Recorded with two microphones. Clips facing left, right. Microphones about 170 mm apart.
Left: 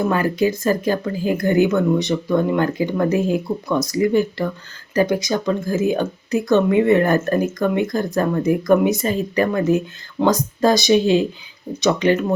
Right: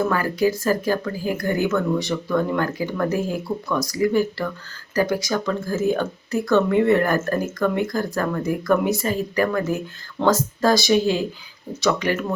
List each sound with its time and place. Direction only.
0.0 s speech: 20° left (ahead or behind)